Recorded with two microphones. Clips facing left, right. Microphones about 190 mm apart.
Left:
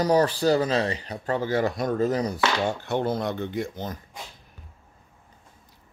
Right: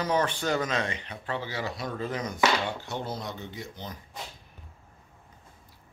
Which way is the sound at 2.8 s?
55° left (ahead or behind).